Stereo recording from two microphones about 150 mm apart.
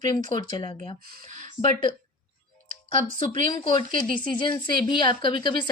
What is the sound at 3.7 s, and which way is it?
Speech, 60° right (ahead or behind).